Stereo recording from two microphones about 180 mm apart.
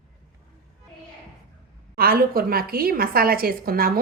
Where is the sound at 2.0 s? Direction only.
55° right (ahead or behind).